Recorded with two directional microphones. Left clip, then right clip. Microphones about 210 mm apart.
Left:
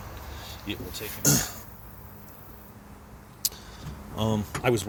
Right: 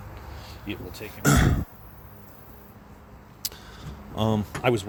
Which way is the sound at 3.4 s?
25° right (ahead or behind).